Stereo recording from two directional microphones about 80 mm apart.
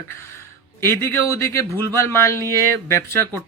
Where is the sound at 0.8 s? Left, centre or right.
Left.